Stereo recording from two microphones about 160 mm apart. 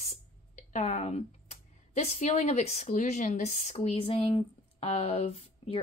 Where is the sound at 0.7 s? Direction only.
45° left (ahead or behind).